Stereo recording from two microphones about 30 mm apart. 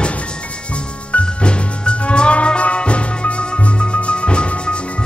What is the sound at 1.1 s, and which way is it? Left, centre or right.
Music, left.